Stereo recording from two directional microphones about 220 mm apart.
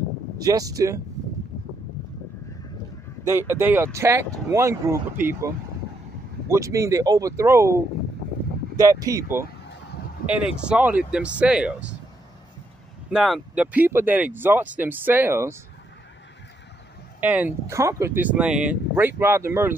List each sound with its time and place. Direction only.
0.4 s speech: 15° right (ahead or behind)
3.3 s speech: 10° right (ahead or behind)
6.5 s speech: 15° right (ahead or behind)
13.1 s speech: centre (ahead or behind)
17.2 s speech: 5° right (ahead or behind)